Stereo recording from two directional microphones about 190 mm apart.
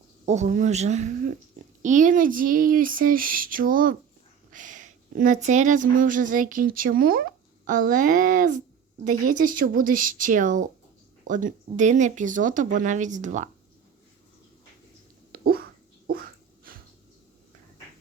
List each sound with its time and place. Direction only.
0.3 s speech: 40° right (ahead or behind)
15.3 s dog: 55° right (ahead or behind)
16.0 s a sound: 50° right (ahead or behind)